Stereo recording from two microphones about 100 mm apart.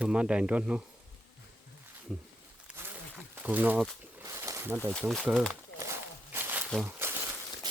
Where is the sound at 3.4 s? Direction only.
15° right (ahead or behind).